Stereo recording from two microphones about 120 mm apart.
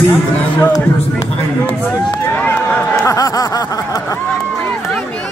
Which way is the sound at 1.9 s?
25° left (ahead or behind).